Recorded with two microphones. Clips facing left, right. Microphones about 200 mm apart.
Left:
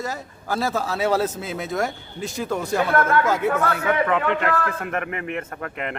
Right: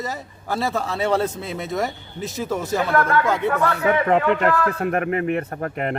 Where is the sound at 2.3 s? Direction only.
Centre (ahead or behind).